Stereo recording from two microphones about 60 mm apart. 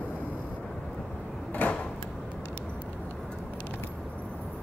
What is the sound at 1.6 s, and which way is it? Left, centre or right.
Drawer open or close, left.